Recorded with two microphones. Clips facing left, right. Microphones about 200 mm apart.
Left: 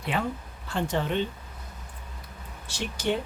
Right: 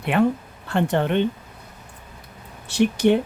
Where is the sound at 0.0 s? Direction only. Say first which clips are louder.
Right 10 dB; 60° right (ahead or behind).